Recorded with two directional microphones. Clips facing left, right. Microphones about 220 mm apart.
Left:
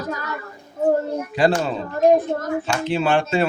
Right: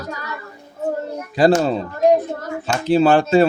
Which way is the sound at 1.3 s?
40° right (ahead or behind).